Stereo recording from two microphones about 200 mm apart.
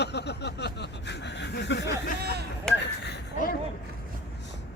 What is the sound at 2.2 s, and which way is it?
Speech, 55° right (ahead or behind).